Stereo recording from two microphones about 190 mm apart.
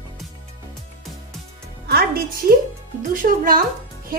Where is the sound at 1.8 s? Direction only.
55° right (ahead or behind).